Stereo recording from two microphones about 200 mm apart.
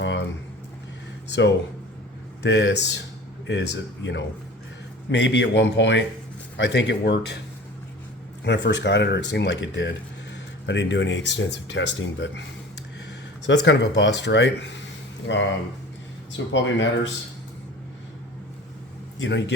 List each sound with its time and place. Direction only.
1.3 s speech: 60° left (ahead or behind)
8.4 s speech: 60° left (ahead or behind)
13.5 s speech: 60° left (ahead or behind)
16.5 s speech: 70° left (ahead or behind)
19.2 s speech: 60° left (ahead or behind)